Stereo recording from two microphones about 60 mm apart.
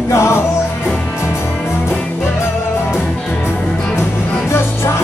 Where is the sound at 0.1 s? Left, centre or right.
Left.